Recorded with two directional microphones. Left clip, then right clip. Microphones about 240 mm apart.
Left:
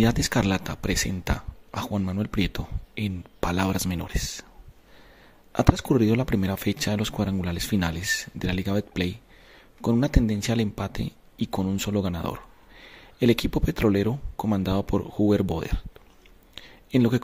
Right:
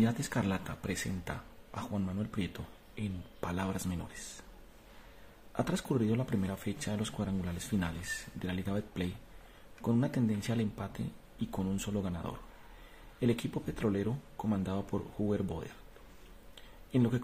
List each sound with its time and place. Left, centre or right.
0.0 s speech: left
5.5 s speech: left
16.5 s a sound: left